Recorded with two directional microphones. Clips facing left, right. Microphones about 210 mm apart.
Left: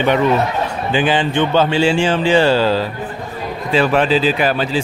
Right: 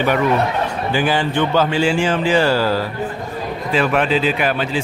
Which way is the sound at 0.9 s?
20° left (ahead or behind).